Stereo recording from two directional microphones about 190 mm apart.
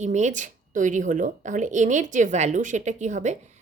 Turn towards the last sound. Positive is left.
turn(degrees=-40)  # may be behind; listen again after turning